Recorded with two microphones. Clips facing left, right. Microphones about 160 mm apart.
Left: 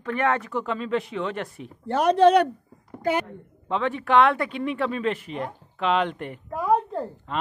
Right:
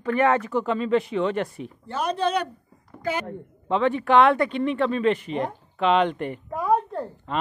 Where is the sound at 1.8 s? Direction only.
70° left (ahead or behind).